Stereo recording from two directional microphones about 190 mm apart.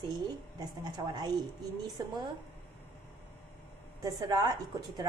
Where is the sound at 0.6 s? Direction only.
20° right (ahead or behind).